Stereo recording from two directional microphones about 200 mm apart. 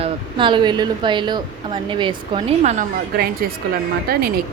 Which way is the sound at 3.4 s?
50° right (ahead or behind).